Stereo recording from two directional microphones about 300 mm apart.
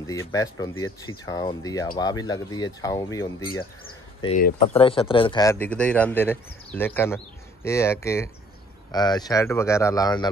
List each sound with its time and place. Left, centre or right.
0.0 s speech: centre